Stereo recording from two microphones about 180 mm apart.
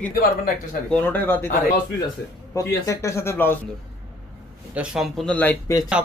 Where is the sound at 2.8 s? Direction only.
15° left (ahead or behind).